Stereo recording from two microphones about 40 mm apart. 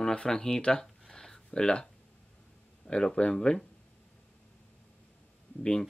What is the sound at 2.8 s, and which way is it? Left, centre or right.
Speech, left.